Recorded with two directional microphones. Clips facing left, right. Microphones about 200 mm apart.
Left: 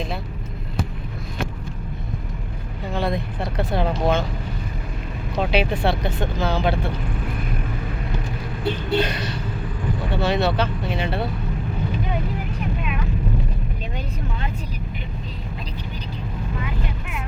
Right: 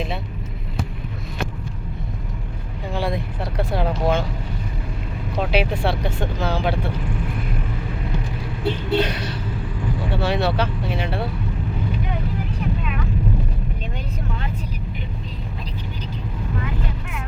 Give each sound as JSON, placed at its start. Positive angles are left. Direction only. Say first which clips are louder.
{"t": 2.9, "sound": "vehicle", "louder": "left 1 dB", "side_deg": -10}
{"t": 5.4, "sound": "vehicle", "louder": "even", "side_deg": -5}
{"t": 5.8, "sound": "speech", "louder": "left 1 dB", "side_deg": -10}
{"t": 9.0, "sound": "speech", "louder": "right 1 dB", "side_deg": -10}